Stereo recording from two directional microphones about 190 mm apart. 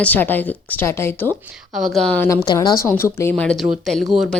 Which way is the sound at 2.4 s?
20° left (ahead or behind).